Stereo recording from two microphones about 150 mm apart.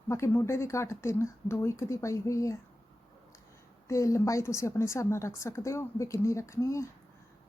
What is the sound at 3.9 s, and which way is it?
A woman's voice, 20° left (ahead or behind).